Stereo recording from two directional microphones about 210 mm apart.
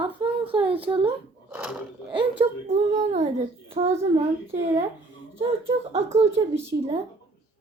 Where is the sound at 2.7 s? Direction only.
35° right (ahead or behind).